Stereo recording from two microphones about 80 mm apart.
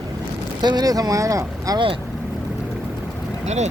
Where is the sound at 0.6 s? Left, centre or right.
Right.